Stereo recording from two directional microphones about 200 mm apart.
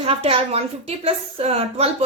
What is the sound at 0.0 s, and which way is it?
A woman's voice, 30° right (ahead or behind).